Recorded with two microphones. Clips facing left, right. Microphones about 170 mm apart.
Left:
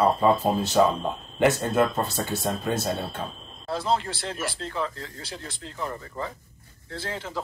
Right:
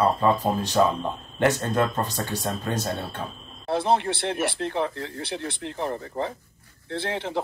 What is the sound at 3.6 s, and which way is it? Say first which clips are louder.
Speech: right 4 dB; 60° right (ahead or behind).